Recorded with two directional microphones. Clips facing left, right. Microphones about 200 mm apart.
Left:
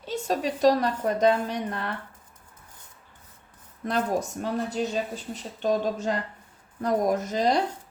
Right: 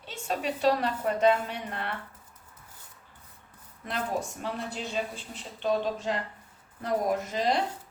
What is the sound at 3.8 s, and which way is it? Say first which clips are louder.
Speech: left 5 dB; 45° left (ahead or behind).